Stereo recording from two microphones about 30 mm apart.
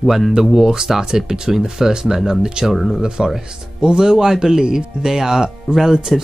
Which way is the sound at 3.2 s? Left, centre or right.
Right.